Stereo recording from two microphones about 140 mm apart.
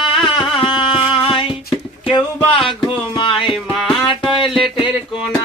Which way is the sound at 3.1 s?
35° left (ahead or behind).